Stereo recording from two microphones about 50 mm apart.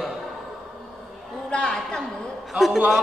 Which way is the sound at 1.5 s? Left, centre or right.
Centre.